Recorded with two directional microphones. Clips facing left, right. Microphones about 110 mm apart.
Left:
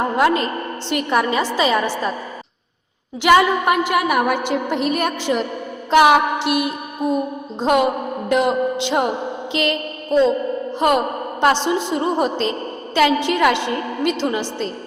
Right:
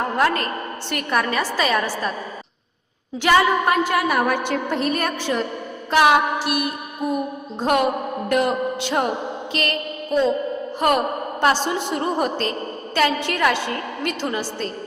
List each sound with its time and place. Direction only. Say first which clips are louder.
0.0 s a woman's voice: left 3 dB; 15° left (ahead or behind)
3.2 s a woman's voice: left 3 dB; 15° left (ahead or behind)
8.3 s music: left 3 dB; 20° left (ahead or behind)
10.8 s a woman's voice: left 2 dB; 20° left (ahead or behind)